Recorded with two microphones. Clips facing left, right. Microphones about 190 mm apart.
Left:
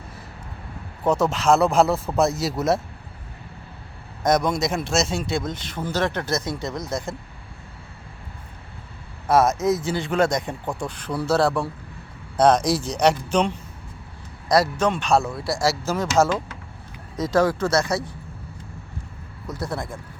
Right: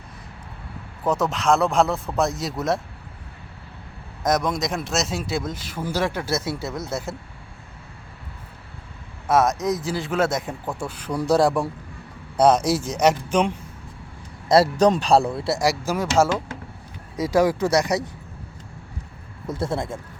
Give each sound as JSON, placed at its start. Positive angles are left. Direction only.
{"t": 1.0, "sound": "speech", "side_deg": 0}
{"t": 4.2, "sound": "speech", "side_deg": 0}
{"t": 9.2, "sound": "speech", "side_deg": 0}
{"t": 14.4, "sound": "a man's voice", "side_deg": -25}
{"t": 15.5, "sound": "speech", "side_deg": -15}
{"t": 17.2, "sound": "speech", "side_deg": -10}
{"t": 19.5, "sound": "speech", "side_deg": -25}